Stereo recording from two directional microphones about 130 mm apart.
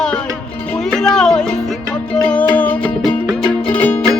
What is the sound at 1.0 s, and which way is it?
Music, 5° left (ahead or behind).